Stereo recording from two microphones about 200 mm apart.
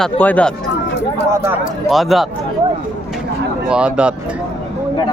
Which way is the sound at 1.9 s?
Centre (ahead or behind).